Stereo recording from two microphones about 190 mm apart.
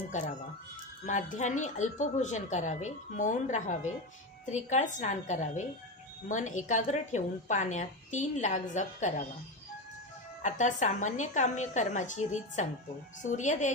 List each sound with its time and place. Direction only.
0.1 s a woman's voice: 40° left (ahead or behind)
10.4 s a woman's voice: 40° left (ahead or behind)